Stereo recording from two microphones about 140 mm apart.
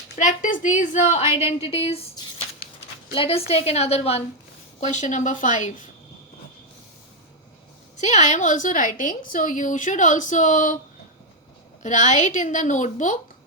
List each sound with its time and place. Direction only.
0.2 s a woman's voice: 65° left (ahead or behind); by 2.0 s 45° left (ahead or behind)
3.2 s a woman's voice: 45° left (ahead or behind); by 5.7 s 60° left (ahead or behind)
7.9 s a woman's voice: 55° left (ahead or behind)
11.8 s a woman's voice: 55° left (ahead or behind)